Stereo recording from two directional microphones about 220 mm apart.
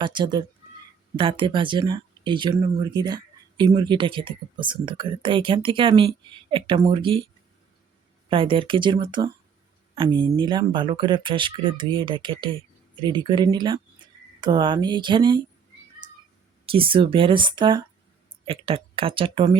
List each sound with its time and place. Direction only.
0.0 s speech: 20° right (ahead or behind)
8.3 s speech: 25° right (ahead or behind)
16.6 s speech: 25° right (ahead or behind)